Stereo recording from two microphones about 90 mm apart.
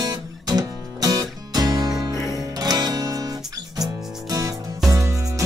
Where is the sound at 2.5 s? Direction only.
45° right (ahead or behind).